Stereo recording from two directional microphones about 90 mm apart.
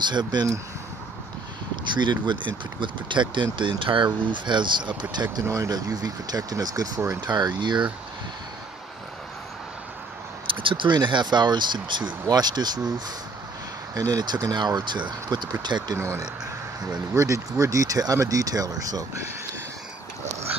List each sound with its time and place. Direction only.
0.0 s speech: 55° right (ahead or behind)
2.0 s speech: 60° right (ahead or behind)
5.5 s speech: 40° right (ahead or behind); by 7.8 s 55° right (ahead or behind)
10.4 s speech: 70° right (ahead or behind); by 12.8 s 50° right (ahead or behind)
13.9 s speech: 45° right (ahead or behind)
17.1 s speech: 35° right (ahead or behind)